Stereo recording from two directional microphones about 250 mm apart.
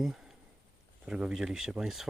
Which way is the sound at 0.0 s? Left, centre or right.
Centre.